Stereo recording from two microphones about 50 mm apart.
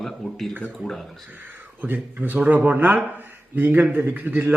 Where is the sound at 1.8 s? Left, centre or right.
Right.